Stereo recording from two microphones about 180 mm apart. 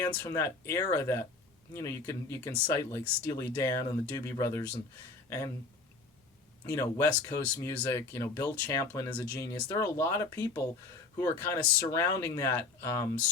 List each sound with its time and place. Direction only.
0.0 s speech: 15° left (ahead or behind)
6.7 s speech: 15° left (ahead or behind)